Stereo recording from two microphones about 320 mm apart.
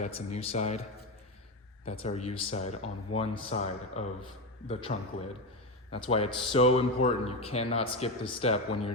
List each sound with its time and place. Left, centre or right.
0.0 s speech: centre